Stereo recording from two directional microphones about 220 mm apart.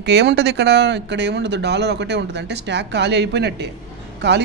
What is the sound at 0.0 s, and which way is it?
Speech, 50° right (ahead or behind).